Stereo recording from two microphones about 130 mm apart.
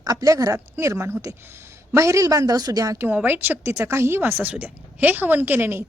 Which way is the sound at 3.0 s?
15° right (ahead or behind).